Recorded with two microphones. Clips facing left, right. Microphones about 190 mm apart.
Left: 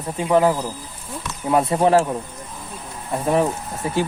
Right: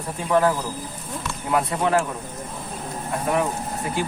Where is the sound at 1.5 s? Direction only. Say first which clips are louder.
Left 5 dB; 30° left (ahead or behind).